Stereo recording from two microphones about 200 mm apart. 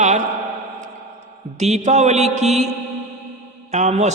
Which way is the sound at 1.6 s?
35° right (ahead or behind).